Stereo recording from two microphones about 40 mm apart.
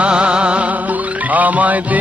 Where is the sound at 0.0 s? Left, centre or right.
Right.